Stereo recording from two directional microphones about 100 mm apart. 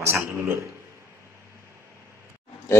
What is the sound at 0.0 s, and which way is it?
Speech, 25° right (ahead or behind).